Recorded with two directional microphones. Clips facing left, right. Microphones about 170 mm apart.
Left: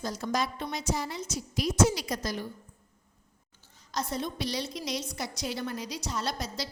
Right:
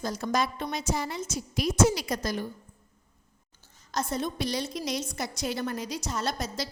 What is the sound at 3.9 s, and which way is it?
A woman's voice, 50° right (ahead or behind).